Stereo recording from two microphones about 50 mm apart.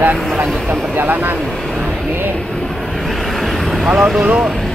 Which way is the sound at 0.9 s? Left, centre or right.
Right.